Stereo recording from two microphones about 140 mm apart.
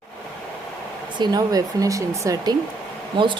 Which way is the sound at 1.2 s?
30° right (ahead or behind).